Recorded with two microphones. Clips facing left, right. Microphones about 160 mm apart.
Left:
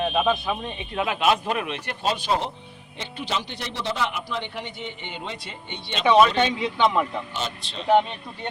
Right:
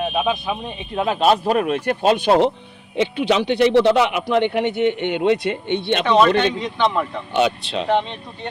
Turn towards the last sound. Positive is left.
turn(degrees=-65)  # may be behind; listen again after turning